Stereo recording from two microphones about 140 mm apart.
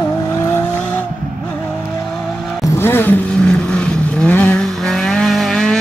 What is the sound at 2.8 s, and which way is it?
Vehicle, 15° left (ahead or behind).